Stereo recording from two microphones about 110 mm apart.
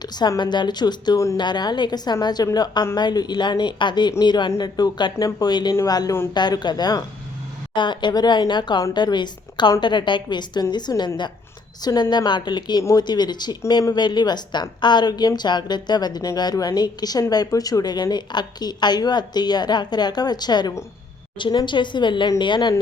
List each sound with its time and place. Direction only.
0.0 s a woman's voice: 40° left (ahead or behind)